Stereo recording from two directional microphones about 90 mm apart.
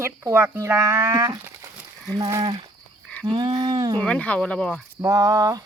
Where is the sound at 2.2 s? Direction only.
40° right (ahead or behind).